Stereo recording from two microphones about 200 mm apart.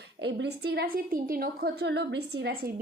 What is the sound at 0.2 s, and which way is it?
A woman's voice, 60° right (ahead or behind).